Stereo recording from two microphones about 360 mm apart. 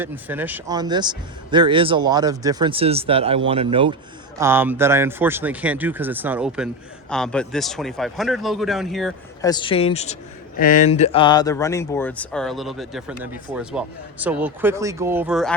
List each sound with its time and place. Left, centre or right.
0.0 s speech: centre
9.5 s speech: centre